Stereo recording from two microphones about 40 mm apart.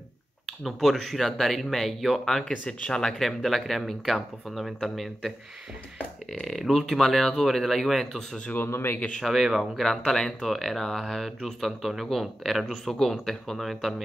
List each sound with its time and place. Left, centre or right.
0.5 s speech: centre
2.6 s speech: left
3.0 s speech: centre
6.4 s speech: centre
8.5 s speech: left
9.2 s speech: centre